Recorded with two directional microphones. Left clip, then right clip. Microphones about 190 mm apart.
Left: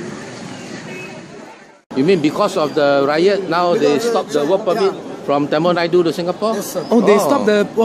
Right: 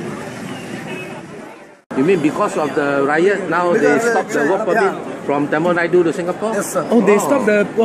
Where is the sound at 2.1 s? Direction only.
60° left (ahead or behind).